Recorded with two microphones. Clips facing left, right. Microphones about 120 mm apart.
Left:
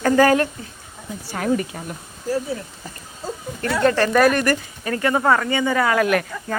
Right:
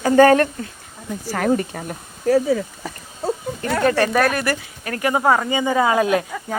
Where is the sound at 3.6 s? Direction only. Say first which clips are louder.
Even; 50° right (ahead or behind).